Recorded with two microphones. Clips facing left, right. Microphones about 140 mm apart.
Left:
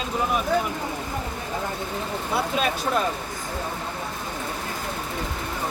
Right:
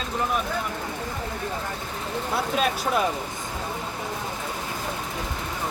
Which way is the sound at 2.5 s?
5° right (ahead or behind).